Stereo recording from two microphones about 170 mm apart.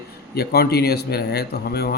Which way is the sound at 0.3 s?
65° left (ahead or behind).